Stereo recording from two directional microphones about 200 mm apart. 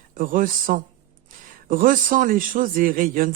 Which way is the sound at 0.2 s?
45° right (ahead or behind).